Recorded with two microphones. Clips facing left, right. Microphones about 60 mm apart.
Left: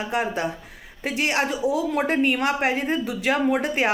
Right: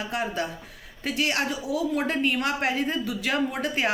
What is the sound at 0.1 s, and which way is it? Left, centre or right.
A woman's voice, left.